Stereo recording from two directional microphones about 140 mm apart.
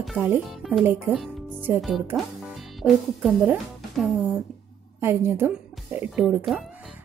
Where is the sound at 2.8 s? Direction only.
Centre (ahead or behind).